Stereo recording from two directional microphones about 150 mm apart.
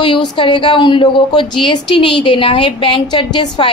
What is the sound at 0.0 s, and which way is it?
A woman's voice, 35° left (ahead or behind).